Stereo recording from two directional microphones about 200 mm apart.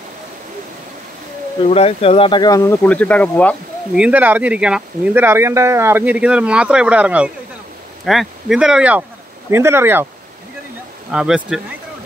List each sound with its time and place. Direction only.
1.7 s speech: 30° left (ahead or behind); by 3.5 s 5° left (ahead or behind)
3.9 s speech: 5° right (ahead or behind)
11.1 s speech: 5° right (ahead or behind)